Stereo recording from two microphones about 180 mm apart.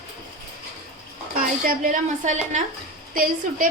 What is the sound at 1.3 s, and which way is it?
A woman's voice, 50° right (ahead or behind).